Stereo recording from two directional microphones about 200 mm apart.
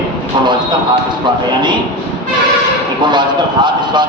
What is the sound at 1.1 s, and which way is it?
Speech, 20° right (ahead or behind).